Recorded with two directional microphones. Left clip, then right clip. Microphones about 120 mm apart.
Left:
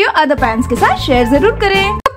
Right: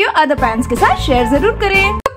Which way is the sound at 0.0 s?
10° left (ahead or behind).